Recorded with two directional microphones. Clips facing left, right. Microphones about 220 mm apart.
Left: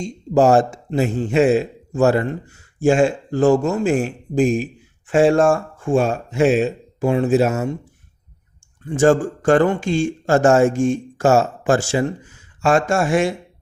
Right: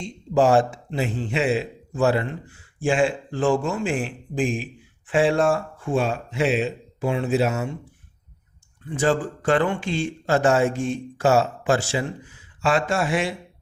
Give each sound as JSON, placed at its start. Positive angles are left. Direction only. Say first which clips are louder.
{"t": 0.0, "sound": "speech", "louder": "left 4 dB", "side_deg": 45}
{"t": 8.9, "sound": "speech", "louder": "left 7 dB", "side_deg": 45}